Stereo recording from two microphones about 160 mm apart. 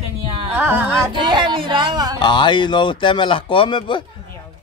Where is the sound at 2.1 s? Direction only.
30° left (ahead or behind).